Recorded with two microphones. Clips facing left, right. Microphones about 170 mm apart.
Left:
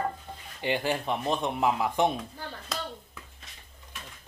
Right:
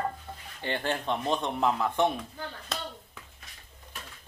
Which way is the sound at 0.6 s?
10° left (ahead or behind).